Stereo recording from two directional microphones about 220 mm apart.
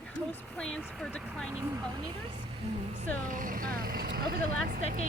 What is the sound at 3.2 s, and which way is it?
Speech, 40° right (ahead or behind).